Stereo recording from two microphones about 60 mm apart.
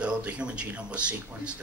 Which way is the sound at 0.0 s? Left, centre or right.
Right.